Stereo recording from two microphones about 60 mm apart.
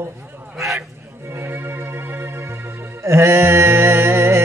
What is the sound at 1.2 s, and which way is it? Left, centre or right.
Music, right.